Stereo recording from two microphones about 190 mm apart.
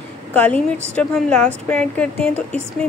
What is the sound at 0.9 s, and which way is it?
A woman's voice, 5° left (ahead or behind).